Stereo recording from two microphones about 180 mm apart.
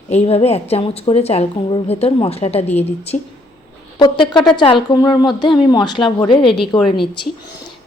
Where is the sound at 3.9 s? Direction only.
25° left (ahead or behind).